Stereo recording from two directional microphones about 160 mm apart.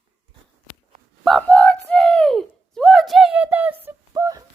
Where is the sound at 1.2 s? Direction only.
5° left (ahead or behind).